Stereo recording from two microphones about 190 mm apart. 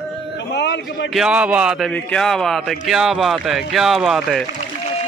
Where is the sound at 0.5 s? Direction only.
65° left (ahead or behind).